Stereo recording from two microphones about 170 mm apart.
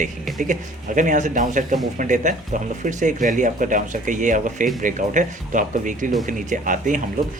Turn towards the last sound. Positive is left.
turn(degrees=-50)  # may be behind; listen again after turning